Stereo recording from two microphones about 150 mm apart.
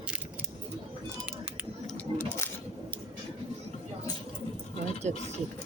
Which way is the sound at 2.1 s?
20° left (ahead or behind).